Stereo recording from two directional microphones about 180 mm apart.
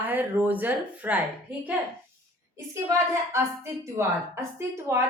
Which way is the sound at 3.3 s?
15° right (ahead or behind).